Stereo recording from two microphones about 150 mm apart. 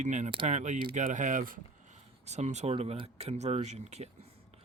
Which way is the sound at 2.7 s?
40° right (ahead or behind).